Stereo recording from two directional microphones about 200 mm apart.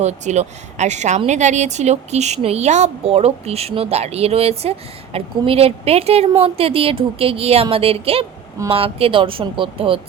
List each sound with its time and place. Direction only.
0.0 s a woman's voice: 35° right (ahead or behind)